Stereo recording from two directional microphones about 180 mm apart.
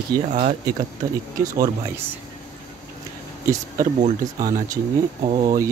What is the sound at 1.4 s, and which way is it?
Speech, 15° right (ahead or behind).